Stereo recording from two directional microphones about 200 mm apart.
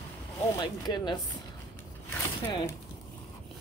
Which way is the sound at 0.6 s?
20° left (ahead or behind).